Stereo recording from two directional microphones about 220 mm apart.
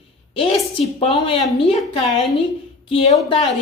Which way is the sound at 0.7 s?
25° left (ahead or behind).